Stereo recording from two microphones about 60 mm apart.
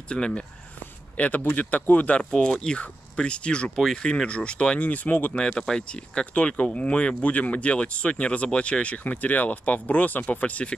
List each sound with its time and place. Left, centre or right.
0.1 s speech: centre
5.4 s speech: centre